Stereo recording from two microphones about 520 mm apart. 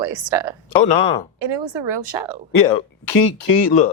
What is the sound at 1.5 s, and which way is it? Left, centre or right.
Speech, right.